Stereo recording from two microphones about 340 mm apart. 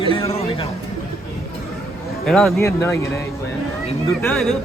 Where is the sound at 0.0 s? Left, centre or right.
Centre.